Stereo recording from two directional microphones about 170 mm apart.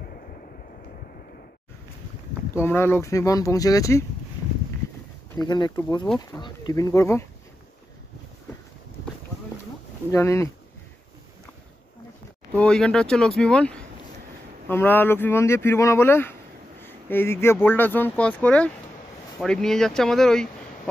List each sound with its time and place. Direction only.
2.5 s speech: 15° left (ahead or behind)
5.4 s speech: 25° left (ahead or behind)
10.1 s speech: 15° left (ahead or behind)
12.5 s speech: 5° left (ahead or behind)